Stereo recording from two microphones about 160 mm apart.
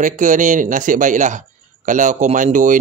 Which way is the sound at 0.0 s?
55° right (ahead or behind).